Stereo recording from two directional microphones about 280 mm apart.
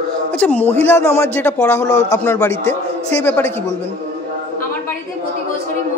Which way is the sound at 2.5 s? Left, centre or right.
Right.